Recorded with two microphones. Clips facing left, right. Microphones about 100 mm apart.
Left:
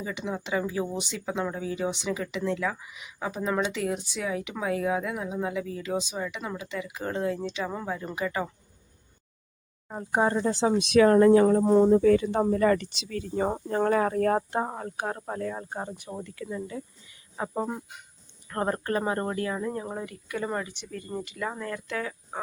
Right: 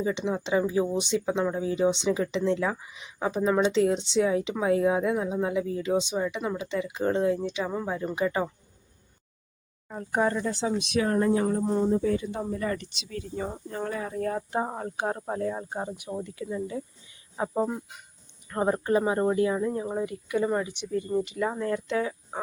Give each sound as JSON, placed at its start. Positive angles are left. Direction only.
{"t": 0.0, "sound": "speech", "side_deg": -25}
{"t": 9.9, "sound": "speech", "side_deg": 20}
{"t": 10.8, "sound": "speech", "side_deg": 90}
{"t": 13.5, "sound": "speech", "side_deg": 65}
{"t": 14.5, "sound": "speech", "side_deg": 0}
{"t": 14.8, "sound": "speech", "side_deg": -15}
{"t": 17.5, "sound": "speech", "side_deg": 0}
{"t": 20.1, "sound": "speech", "side_deg": -20}